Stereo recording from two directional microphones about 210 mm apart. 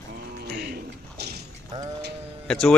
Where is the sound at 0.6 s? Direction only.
50° right (ahead or behind).